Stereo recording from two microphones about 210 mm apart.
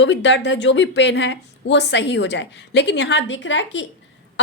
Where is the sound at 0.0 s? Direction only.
60° left (ahead or behind).